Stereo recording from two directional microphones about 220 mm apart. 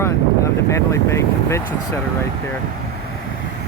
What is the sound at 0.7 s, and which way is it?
Speech, 15° left (ahead or behind).